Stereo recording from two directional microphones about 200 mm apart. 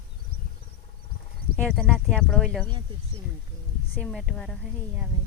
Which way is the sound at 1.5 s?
5° left (ahead or behind).